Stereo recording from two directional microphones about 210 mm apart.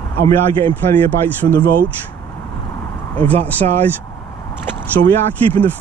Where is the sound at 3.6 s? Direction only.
35° right (ahead or behind).